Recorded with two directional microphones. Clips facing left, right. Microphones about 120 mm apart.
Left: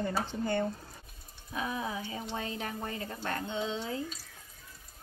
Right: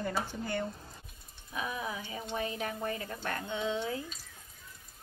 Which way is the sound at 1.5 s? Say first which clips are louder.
Left 2 dB; 25° left (ahead or behind).